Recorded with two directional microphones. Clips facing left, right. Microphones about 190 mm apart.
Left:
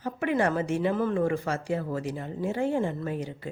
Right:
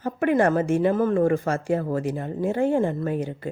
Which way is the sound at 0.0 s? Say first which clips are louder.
Right 6 dB; 50° right (ahead or behind).